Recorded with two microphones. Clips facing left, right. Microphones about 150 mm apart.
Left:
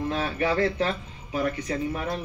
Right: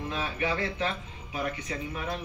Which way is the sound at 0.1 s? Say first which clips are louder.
Left 4 dB; 40° left (ahead or behind).